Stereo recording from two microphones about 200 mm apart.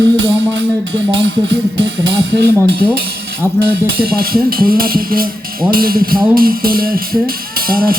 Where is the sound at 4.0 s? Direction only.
50° right (ahead or behind).